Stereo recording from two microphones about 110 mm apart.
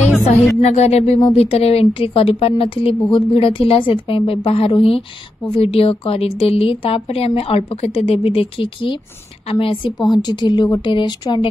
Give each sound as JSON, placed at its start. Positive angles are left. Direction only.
{"t": 0.6, "sound": "a sound", "side_deg": 80}
{"t": 1.3, "sound": "speech", "side_deg": 65}
{"t": 9.9, "sound": "a woman's voice", "side_deg": 40}